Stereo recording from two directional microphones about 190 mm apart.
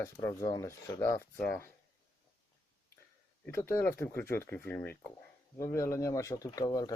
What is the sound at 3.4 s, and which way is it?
Speech, 15° left (ahead or behind).